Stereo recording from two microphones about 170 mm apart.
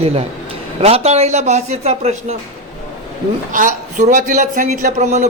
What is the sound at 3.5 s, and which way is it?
Speech, 50° right (ahead or behind).